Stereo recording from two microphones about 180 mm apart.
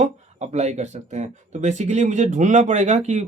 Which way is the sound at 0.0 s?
40° right (ahead or behind).